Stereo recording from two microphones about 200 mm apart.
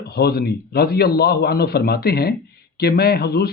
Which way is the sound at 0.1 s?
55° left (ahead or behind).